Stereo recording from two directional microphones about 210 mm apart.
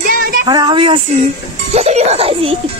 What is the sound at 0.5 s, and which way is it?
A woman's voice, 20° right (ahead or behind).